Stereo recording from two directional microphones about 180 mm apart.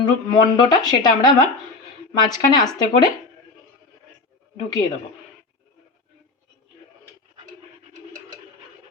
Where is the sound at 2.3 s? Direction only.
20° left (ahead or behind).